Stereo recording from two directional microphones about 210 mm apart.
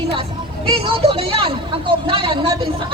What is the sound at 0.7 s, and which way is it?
A woman's voice, 25° right (ahead or behind).